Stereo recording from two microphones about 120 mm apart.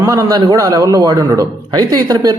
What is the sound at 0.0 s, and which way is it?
Speech, 25° right (ahead or behind).